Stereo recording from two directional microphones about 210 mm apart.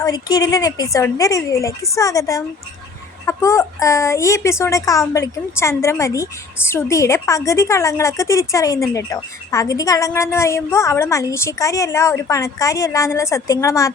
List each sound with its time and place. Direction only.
0.0 s a woman's voice: 20° left (ahead or behind)